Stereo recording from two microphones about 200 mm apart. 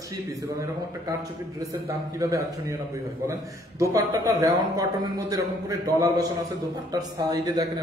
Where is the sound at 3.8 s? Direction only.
15° right (ahead or behind).